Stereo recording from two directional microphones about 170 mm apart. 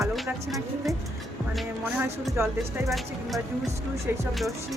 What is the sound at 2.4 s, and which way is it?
Speech, 15° right (ahead or behind).